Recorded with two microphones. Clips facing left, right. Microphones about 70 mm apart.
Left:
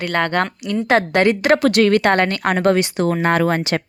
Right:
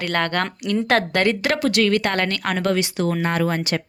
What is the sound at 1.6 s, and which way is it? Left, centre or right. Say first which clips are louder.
Speech: left 5 dB; left.